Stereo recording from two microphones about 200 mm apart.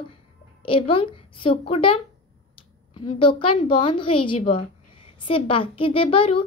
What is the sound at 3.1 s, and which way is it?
A child's voice, 25° left (ahead or behind).